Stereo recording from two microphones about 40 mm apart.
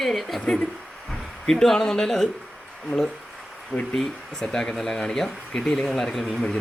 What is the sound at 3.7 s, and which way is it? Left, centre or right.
Speech, left.